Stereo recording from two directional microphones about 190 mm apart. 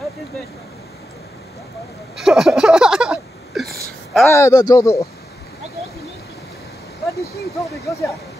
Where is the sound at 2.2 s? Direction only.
Centre (ahead or behind).